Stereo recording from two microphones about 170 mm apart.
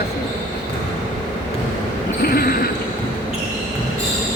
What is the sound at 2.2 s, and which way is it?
Speech, 65° left (ahead or behind).